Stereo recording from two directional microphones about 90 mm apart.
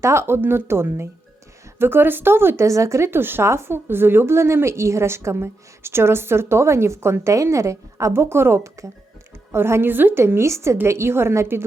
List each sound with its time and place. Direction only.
0.0 s speech: 30° right (ahead or behind)